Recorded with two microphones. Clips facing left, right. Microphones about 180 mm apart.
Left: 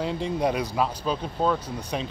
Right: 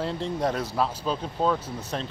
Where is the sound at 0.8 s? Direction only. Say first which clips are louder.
Left 1 dB; 5° left (ahead or behind).